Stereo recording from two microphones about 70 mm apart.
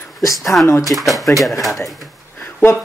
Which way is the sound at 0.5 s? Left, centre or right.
Left.